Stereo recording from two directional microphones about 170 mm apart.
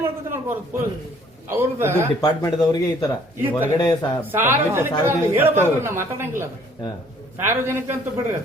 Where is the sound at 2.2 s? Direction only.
20° left (ahead or behind).